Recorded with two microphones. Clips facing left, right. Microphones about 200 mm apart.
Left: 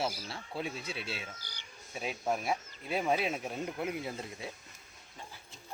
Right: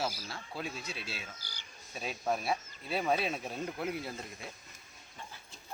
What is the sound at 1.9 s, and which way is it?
Speech, 15° left (ahead or behind).